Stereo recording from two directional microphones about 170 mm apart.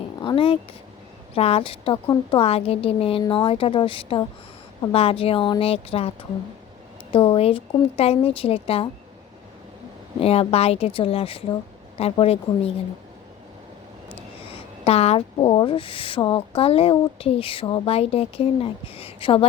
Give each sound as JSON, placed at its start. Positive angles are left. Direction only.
{"t": 0.2, "sound": "speech", "side_deg": 30}
{"t": 10.2, "sound": "speech", "side_deg": 35}
{"t": 14.2, "sound": "speech", "side_deg": 35}